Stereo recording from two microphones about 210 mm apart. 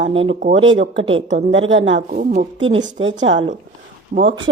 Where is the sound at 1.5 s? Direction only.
65° right (ahead or behind).